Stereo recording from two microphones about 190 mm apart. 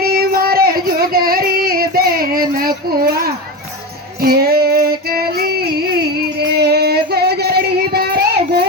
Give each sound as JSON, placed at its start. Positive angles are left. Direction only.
{"t": 0.0, "sound": "music", "side_deg": -55}
{"t": 4.2, "sound": "female singing", "side_deg": -55}